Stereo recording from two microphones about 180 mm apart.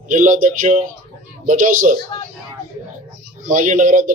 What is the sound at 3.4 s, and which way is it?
Speech, 45° right (ahead or behind).